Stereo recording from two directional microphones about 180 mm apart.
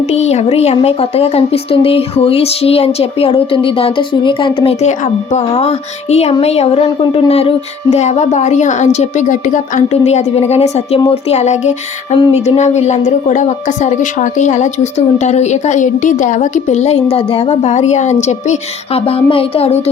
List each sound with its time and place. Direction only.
0.0 s speech: 35° left (ahead or behind)